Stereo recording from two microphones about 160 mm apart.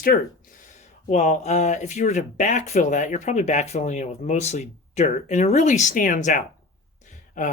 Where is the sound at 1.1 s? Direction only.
45° left (ahead or behind).